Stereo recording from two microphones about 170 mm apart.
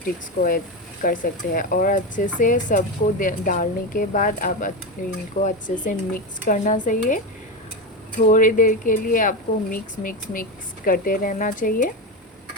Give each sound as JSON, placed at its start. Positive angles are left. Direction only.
{"t": 0.0, "sound": "speech", "side_deg": 55}